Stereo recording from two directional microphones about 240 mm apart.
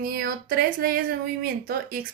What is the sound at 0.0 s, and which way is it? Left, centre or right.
Speech, right.